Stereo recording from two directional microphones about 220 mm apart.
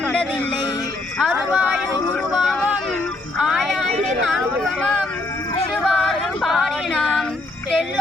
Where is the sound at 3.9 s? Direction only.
30° right (ahead or behind).